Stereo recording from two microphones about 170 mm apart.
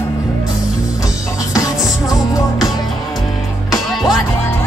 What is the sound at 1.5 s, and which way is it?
Music, 20° left (ahead or behind).